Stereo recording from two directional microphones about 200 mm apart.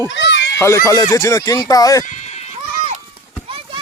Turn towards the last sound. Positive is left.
turn(degrees=-25)  # may be behind; listen again after turning